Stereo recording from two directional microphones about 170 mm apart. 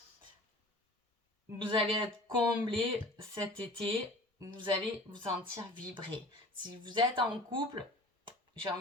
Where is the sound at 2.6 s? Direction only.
30° right (ahead or behind).